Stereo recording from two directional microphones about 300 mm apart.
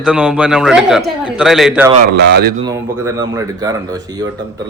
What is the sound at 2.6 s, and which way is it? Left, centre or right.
Speech, centre.